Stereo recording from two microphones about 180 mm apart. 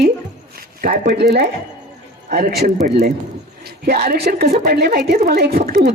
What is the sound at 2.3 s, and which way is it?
Speech, 55° right (ahead or behind).